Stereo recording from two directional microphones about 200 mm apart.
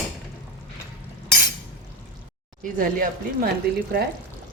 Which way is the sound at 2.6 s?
45° right (ahead or behind).